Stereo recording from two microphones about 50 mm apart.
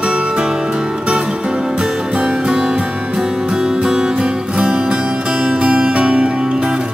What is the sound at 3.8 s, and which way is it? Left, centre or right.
Music, centre.